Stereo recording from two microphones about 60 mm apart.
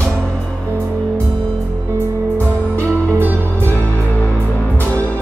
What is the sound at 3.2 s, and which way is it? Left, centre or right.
Music, right.